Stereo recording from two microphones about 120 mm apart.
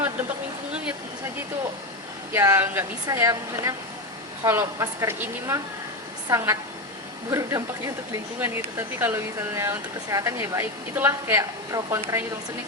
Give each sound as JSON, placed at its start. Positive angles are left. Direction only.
{"t": 2.3, "sound": "speech", "side_deg": -20}
{"t": 6.2, "sound": "speech", "side_deg": -25}